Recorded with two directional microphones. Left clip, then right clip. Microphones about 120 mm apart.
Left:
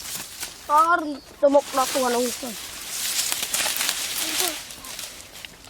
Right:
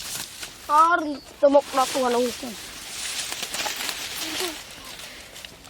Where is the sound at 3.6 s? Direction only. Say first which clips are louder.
Left 4 dB; 40° left (ahead or behind).